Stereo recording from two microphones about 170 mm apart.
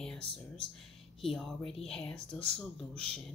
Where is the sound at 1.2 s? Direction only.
Centre (ahead or behind).